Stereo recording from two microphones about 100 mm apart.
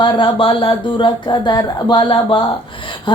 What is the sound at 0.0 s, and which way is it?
Speech, 55° left (ahead or behind).